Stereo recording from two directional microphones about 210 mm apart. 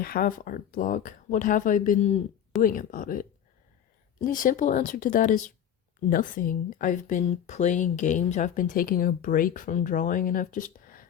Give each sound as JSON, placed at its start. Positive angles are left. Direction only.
{"t": 0.0, "sound": "speech", "side_deg": 45}
{"t": 2.6, "sound": "speech", "side_deg": 40}